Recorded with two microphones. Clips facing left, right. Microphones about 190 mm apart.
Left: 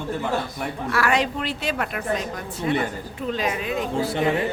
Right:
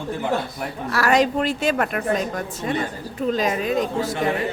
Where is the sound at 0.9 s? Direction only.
40° right (ahead or behind).